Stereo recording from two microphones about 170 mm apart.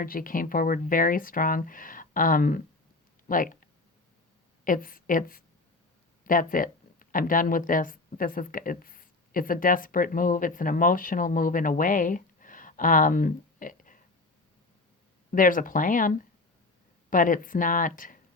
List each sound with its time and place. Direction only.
0.0 s speech: 55° left (ahead or behind)
15.3 s speech: 55° left (ahead or behind)